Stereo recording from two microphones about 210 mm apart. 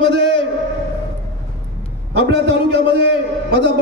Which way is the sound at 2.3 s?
50° right (ahead or behind).